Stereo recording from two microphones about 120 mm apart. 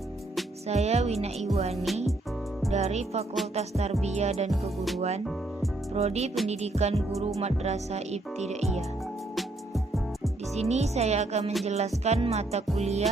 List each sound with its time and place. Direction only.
0.7 s speech: 65° right (ahead or behind)
1.7 s music: centre (ahead or behind)
2.7 s speech: 70° right (ahead or behind)
9.3 s music: centre (ahead or behind)
10.5 s speech: 65° right (ahead or behind)